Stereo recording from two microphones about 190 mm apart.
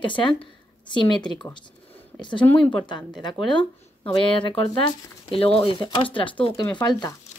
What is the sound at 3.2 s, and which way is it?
A woman's voice, 25° left (ahead or behind).